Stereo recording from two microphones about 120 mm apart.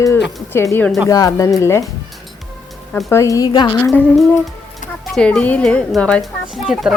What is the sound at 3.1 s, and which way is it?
Speech, 25° left (ahead or behind).